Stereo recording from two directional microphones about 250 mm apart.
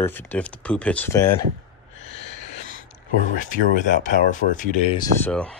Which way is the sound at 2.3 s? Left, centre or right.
Right.